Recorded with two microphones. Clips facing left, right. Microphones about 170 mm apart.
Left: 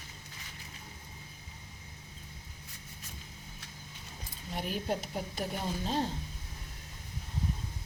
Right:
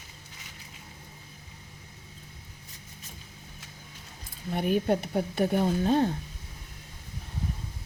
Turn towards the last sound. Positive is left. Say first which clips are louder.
# right 9 dB
turn(degrees=-55)  # may be behind; listen again after turning